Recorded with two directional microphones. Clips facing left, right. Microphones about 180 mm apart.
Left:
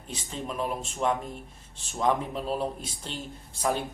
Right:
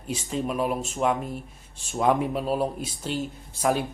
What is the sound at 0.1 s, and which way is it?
Speech, 10° right (ahead or behind).